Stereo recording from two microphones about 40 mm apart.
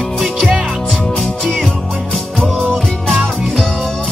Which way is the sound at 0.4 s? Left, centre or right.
Right.